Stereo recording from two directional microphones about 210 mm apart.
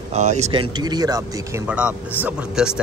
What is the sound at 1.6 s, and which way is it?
Speech, 5° right (ahead or behind).